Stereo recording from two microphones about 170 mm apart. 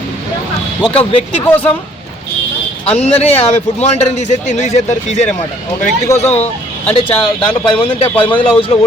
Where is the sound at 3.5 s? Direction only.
40° left (ahead or behind).